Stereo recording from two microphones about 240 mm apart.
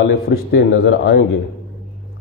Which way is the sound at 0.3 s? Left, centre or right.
Left.